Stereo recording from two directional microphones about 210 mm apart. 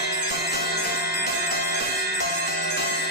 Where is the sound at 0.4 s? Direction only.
45° left (ahead or behind).